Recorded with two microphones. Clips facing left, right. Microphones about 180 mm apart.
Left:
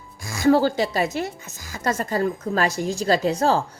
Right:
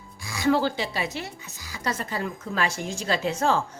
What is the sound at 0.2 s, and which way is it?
Speech, 45° left (ahead or behind).